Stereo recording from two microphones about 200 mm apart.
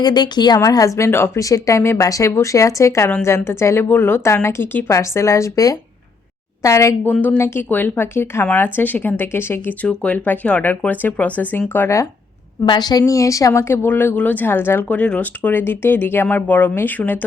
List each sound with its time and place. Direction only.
0.0 s speech: 20° left (ahead or behind)